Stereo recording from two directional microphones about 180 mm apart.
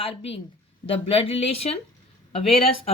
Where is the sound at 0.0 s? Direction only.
30° left (ahead or behind).